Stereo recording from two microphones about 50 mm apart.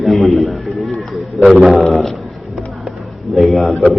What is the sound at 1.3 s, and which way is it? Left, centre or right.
Speech, centre.